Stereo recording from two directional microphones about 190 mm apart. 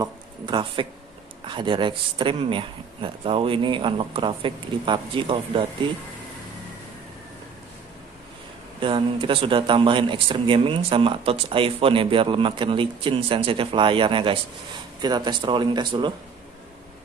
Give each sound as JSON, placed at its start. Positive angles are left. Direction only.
{"t": 0.0, "sound": "a sound", "side_deg": -25}
{"t": 1.5, "sound": "speech", "side_deg": -25}
{"t": 8.7, "sound": "speech", "side_deg": -25}